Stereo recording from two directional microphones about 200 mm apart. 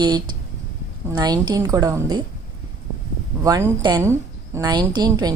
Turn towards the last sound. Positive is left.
turn(degrees=-20)  # may be behind; listen again after turning